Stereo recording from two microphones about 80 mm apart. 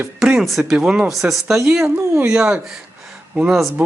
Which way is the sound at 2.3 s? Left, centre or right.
Centre.